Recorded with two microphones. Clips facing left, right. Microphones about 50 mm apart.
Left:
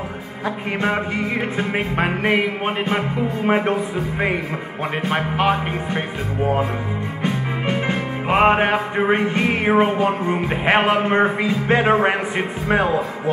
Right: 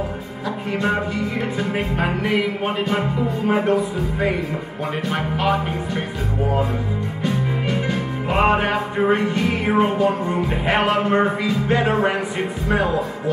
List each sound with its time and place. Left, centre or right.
1.6 s music: left
5.1 s speech: left
7.6 s music: left